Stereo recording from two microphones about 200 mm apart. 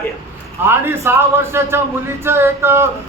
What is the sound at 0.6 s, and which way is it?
A man's voice, 10° right (ahead or behind).